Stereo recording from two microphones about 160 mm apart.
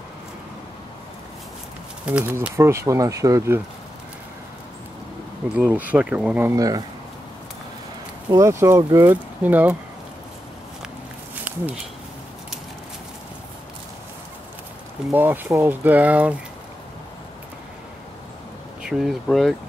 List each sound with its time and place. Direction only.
2.0 s speech: 10° right (ahead or behind)
5.6 s speech: 10° right (ahead or behind)
8.3 s speech: 20° right (ahead or behind)
11.4 s speech: 5° right (ahead or behind)
15.0 s speech: 10° right (ahead or behind)
18.8 s speech: 5° right (ahead or behind)